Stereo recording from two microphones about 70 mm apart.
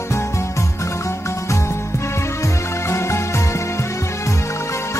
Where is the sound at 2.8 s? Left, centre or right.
Left.